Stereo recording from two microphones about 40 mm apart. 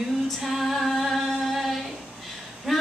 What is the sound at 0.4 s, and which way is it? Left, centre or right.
Female singing, centre.